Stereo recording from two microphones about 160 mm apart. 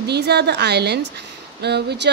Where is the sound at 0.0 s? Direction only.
90° right.